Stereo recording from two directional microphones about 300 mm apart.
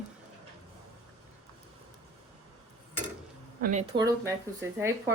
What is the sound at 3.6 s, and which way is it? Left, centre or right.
Speech, right.